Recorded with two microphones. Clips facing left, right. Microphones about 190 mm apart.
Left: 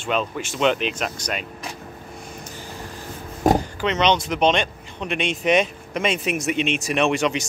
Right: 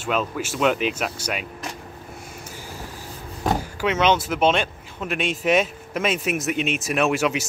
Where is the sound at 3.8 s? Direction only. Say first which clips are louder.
Even; 5° right (ahead or behind).